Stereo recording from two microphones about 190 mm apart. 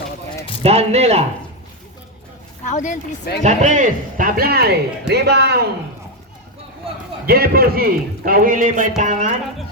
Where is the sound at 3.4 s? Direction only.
40° right (ahead or behind); by 5.6 s 60° right (ahead or behind).